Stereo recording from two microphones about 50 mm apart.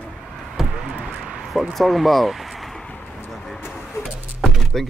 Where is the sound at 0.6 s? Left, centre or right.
Centre.